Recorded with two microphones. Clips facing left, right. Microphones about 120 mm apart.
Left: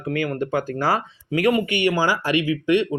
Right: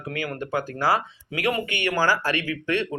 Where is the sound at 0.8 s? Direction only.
40° left (ahead or behind).